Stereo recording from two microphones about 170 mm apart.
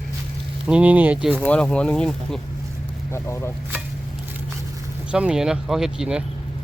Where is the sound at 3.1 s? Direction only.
15° left (ahead or behind).